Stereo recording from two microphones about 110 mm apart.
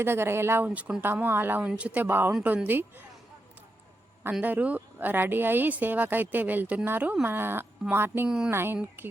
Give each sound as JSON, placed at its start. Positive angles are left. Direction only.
{"t": 0.0, "sound": "a woman's voice", "side_deg": -20}
{"t": 4.4, "sound": "a woman's voice", "side_deg": -15}